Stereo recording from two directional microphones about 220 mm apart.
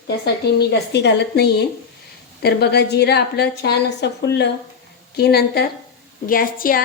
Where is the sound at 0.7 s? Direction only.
50° left (ahead or behind).